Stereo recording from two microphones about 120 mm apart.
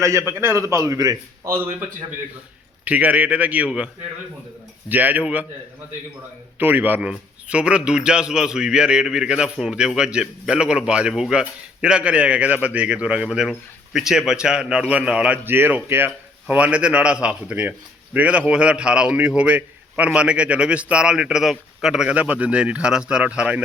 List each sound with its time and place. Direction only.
0.0 s a man's voice: 25° right (ahead or behind)
2.8 s a man's voice: 10° right (ahead or behind)
4.9 s a man's voice: 15° right (ahead or behind)
6.6 s a man's voice: 15° right (ahead or behind)